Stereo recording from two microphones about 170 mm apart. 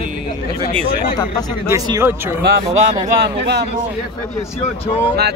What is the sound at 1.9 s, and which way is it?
Speech, 15° right (ahead or behind).